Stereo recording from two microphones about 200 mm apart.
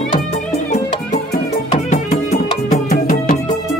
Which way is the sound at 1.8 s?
35° left (ahead or behind).